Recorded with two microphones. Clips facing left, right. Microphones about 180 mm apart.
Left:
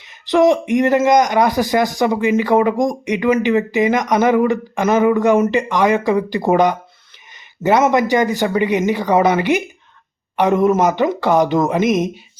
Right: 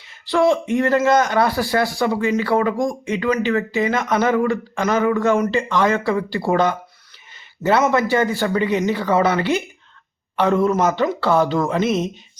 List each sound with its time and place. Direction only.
0.0 s a man's voice: 20° left (ahead or behind)